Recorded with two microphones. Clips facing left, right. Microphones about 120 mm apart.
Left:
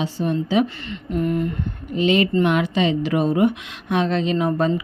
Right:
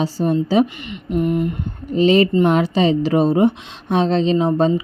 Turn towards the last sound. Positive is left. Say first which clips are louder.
# right 4 dB
turn(degrees=-25)  # may be behind; listen again after turning